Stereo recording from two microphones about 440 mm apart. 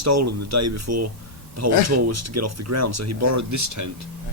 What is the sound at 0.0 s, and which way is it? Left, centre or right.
Speech, right.